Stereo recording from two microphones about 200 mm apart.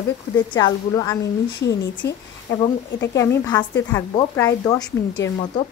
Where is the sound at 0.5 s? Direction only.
20° left (ahead or behind).